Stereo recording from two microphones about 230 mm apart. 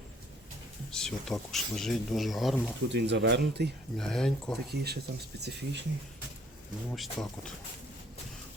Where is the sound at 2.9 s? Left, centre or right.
Right.